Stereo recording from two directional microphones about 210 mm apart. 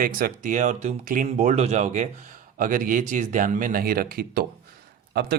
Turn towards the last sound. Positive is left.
turn(degrees=-50)  # may be behind; listen again after turning